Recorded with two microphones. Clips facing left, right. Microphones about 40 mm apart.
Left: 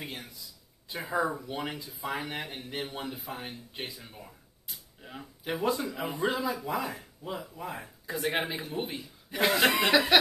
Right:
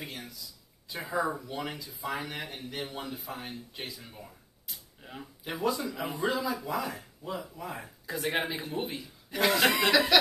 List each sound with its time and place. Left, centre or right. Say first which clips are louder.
0.9 s speech: left 1 dB; centre
4.1 s a sound: even; centre
5.6 s speech: even; left
5.9 s speech: even; centre
6.1 s speech: left 1 dB; left
6.9 s speech: even; centre
9.3 s speech: even; centre